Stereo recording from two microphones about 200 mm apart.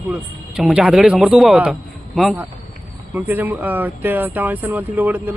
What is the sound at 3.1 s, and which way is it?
Speech, 10° right (ahead or behind).